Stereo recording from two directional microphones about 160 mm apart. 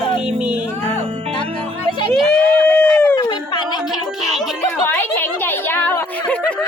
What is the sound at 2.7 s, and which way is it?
Howl, 25° left (ahead or behind).